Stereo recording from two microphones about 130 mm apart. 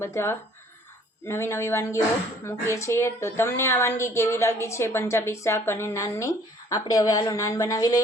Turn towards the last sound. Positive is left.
turn(degrees=25)  # may be behind; listen again after turning